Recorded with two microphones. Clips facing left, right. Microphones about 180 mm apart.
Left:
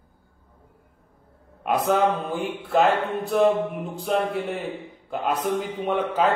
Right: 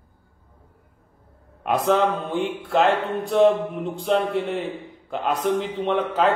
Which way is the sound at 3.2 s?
5° left (ahead or behind).